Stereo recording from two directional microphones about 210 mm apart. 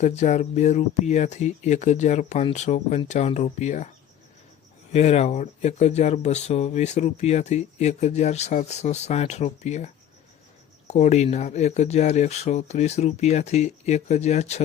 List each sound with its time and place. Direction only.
0.0 s speech: 35° left (ahead or behind)